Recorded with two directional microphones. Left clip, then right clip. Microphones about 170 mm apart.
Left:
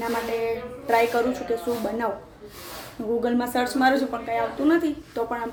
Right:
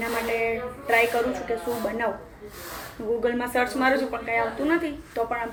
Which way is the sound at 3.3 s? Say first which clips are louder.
Left 1 dB; 15° left (ahead or behind).